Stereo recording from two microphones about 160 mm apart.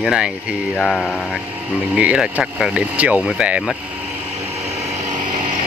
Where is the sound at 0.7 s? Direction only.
5° left (ahead or behind).